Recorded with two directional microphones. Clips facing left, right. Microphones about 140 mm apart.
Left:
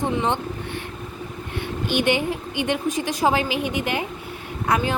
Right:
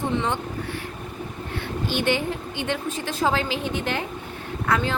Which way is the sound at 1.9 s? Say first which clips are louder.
Left 3 dB; 15° left (ahead or behind).